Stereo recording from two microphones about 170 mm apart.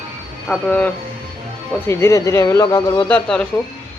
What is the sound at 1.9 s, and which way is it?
Speech, 15° left (ahead or behind).